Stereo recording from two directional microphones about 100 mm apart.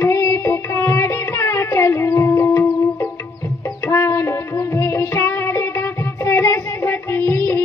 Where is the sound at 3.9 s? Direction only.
30° left (ahead or behind).